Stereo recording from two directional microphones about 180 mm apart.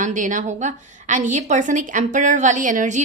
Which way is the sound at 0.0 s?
45° right (ahead or behind).